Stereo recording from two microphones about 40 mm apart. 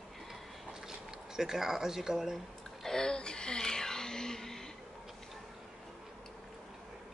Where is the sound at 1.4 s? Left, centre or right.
Centre.